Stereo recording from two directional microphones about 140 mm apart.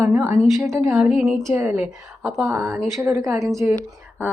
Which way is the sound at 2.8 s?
Centre (ahead or behind).